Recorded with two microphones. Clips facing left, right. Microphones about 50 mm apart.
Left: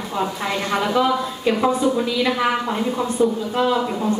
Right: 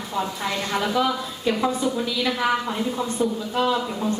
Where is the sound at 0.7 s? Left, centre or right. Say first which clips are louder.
Left 4 dB; centre.